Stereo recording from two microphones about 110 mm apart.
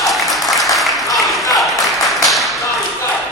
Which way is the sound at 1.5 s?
Centre (ahead or behind).